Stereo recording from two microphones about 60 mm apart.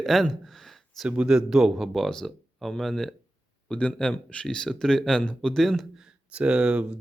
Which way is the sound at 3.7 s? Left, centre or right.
Centre.